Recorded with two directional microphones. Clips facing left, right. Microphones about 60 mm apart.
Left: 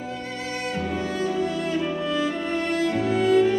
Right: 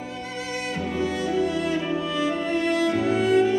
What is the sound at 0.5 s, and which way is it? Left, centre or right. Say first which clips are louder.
Music: left 1 dB; left.